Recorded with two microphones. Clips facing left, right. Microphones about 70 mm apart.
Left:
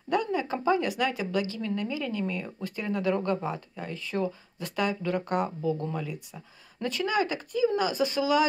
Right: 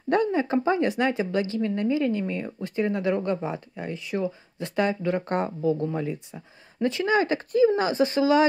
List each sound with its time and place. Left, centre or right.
0.1 s a woman's voice: right; by 4.3 s centre
4.6 s a woman's voice: right